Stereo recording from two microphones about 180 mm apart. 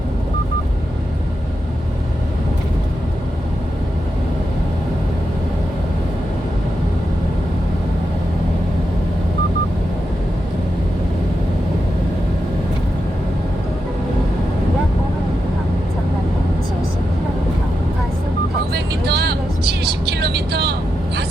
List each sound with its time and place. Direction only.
18.7 s vehicle: 65° right (ahead or behind)